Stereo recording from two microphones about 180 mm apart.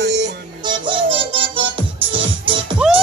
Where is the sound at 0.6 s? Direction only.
30° right (ahead or behind).